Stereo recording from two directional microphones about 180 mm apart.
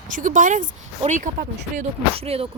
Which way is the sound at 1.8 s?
35° right (ahead or behind).